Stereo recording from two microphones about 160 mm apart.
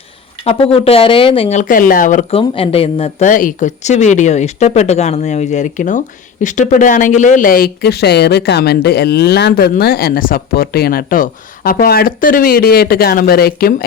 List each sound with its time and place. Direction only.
0.4 s speech: 35° left (ahead or behind); by 2.2 s 55° left (ahead or behind)
2.3 s speech: 35° left (ahead or behind)
3.2 s speech: 55° left (ahead or behind)